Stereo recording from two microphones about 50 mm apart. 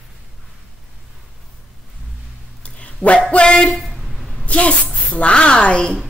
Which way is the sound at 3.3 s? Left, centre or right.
Left.